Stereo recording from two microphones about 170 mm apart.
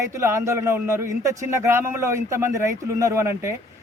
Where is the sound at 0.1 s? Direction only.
15° right (ahead or behind).